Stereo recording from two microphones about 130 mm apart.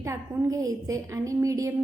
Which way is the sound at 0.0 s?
25° right (ahead or behind).